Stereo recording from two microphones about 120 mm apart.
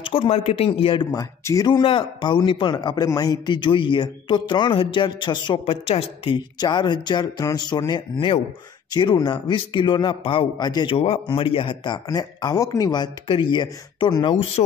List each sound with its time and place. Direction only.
0.0 s speech: 55° left (ahead or behind)
1.1 s speech: 30° left (ahead or behind)
1.7 s speech: 45° left (ahead or behind)
5.9 s a woman's voice: 55° left (ahead or behind)
6.3 s speech: 40° left (ahead or behind)
11.0 s speech: 50° left (ahead or behind)